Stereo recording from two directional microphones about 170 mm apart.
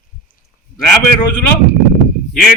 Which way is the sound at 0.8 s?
10° left (ahead or behind).